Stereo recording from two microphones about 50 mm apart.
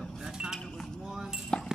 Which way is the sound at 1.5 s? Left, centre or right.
Centre.